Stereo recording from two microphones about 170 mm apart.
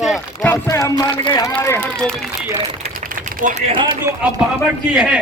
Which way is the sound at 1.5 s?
15° left (ahead or behind).